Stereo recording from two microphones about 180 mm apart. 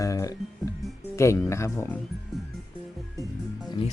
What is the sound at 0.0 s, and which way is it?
Speech, 20° left (ahead or behind).